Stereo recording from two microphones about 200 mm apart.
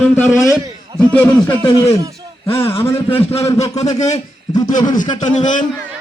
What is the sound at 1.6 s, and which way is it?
Speech, 25° left (ahead or behind).